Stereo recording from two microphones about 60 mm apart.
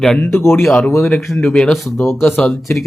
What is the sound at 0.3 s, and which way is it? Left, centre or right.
Speech, left.